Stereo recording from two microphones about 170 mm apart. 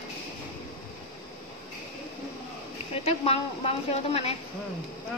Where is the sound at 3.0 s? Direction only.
35° left (ahead or behind).